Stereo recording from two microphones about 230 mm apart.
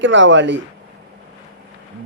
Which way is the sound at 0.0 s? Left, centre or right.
Right.